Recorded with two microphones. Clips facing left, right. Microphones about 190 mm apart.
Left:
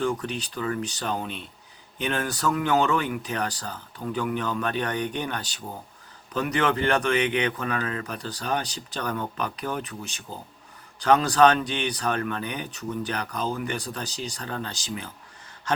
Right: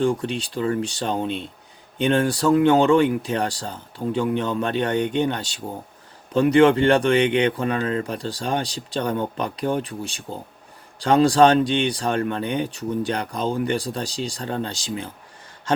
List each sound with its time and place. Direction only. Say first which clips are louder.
0.0 s speech: right 5 dB; 30° right (ahead or behind)